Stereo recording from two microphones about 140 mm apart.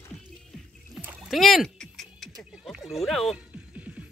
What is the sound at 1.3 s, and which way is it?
Music, centre (ahead or behind).